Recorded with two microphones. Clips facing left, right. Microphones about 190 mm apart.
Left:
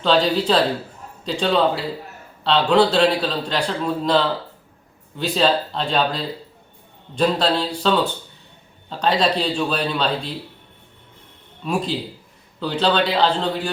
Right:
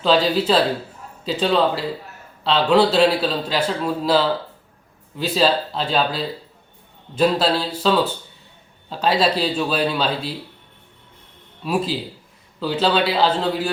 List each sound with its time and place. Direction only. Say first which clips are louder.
0.0 s a man's voice: even; centre (ahead or behind)
11.6 s a man's voice: right 1 dB; 5° right (ahead or behind)